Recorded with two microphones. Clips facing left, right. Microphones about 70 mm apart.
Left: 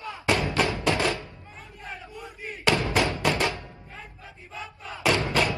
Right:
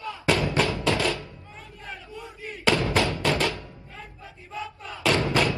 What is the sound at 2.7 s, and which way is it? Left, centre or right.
Music, left.